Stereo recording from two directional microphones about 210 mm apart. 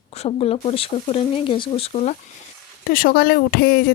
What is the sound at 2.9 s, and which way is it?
Speech, 40° left (ahead or behind).